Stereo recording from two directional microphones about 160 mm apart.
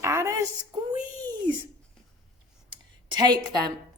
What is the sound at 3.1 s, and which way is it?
Speech, 25° right (ahead or behind).